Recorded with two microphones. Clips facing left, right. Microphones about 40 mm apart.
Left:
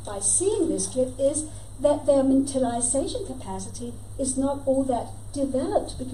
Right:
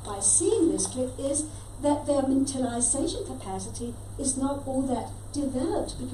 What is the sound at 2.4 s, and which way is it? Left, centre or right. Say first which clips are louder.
A woman's voice: left 3 dB; centre.